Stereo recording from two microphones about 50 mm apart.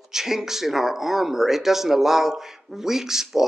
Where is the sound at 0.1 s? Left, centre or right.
Centre.